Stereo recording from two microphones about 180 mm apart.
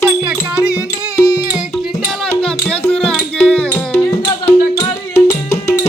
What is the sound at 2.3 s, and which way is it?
Music, 5° left (ahead or behind).